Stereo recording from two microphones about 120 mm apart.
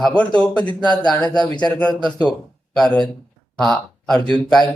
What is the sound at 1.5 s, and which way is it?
Speech, 10° left (ahead or behind).